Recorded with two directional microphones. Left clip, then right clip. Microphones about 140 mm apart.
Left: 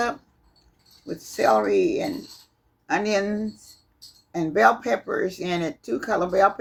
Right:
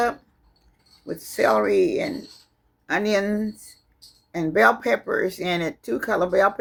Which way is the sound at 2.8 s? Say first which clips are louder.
Right 1 dB; 75° right (ahead or behind).